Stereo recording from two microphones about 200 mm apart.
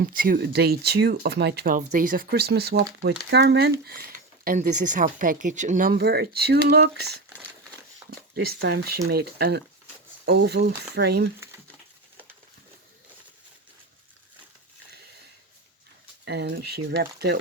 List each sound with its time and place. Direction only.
0.0 s speech: 45° right (ahead or behind)
8.6 s speech: 50° right (ahead or behind)
16.2 s speech: 55° right (ahead or behind)